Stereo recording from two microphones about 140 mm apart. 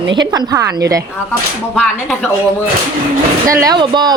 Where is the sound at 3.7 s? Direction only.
30° right (ahead or behind).